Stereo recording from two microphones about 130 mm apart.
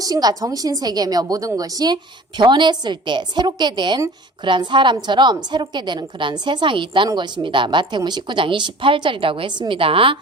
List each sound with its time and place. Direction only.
0.0 s a woman's voice: 30° right (ahead or behind)